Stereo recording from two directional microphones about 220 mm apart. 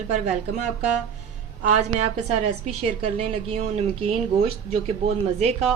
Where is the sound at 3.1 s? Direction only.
30° right (ahead or behind).